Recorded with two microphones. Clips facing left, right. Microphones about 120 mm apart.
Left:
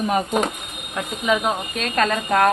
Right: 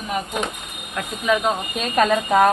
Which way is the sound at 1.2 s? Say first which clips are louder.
Right 1 dB; 5° left (ahead or behind).